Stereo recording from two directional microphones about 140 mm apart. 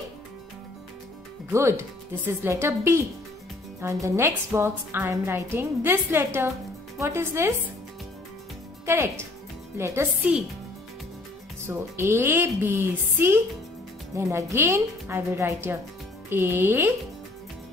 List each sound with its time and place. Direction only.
1.5 s a woman's voice: 20° right (ahead or behind)
8.8 s a woman's voice: 20° right (ahead or behind)
12.0 s a woman's voice: 15° right (ahead or behind)